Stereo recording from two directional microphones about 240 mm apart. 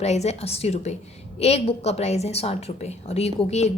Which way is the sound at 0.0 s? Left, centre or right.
Left.